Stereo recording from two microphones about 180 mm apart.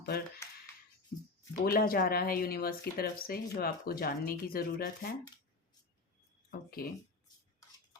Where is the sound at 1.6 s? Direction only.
55° left (ahead or behind).